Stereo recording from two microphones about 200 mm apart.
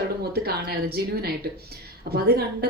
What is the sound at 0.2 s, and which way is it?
A woman's voice, 50° right (ahead or behind).